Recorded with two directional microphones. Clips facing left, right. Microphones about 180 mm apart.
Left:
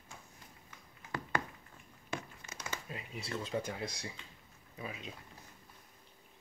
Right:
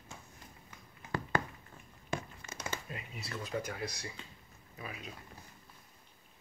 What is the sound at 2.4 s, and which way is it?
Crumpling, 30° right (ahead or behind).